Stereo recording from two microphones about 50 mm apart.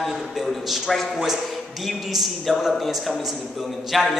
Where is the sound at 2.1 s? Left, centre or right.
Centre.